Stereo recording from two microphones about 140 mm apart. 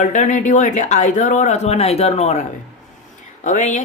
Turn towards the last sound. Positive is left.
turn(degrees=60)  # may be behind; listen again after turning